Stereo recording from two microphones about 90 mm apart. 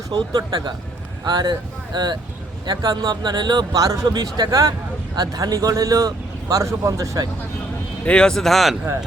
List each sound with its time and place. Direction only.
0.1 s speech: 50° right (ahead or behind)
8.0 s speech: 10° left (ahead or behind)